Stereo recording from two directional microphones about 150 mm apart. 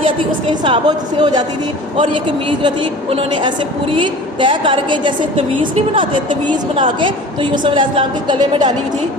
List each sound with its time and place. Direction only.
0.6 s a woman's voice: 30° right (ahead or behind)